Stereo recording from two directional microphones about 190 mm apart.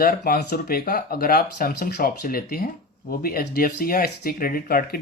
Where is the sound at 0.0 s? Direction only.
50° left (ahead or behind).